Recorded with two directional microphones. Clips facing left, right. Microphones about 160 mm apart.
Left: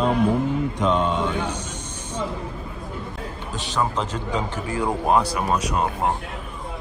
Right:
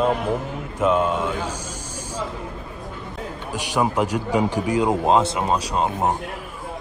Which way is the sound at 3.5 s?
10° right (ahead or behind).